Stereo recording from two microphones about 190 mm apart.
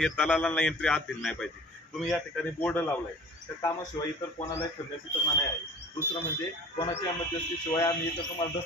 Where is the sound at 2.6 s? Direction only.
10° left (ahead or behind).